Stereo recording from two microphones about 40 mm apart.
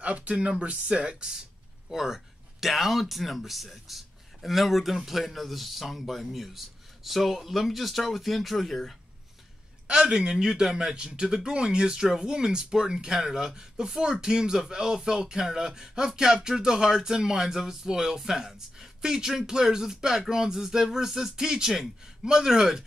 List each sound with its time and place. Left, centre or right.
0.0 s speech: right; by 8.9 s centre
9.8 s speech: right